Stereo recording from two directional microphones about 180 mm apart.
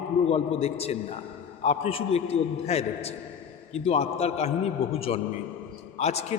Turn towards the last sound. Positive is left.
turn(degrees=35)  # may be behind; listen again after turning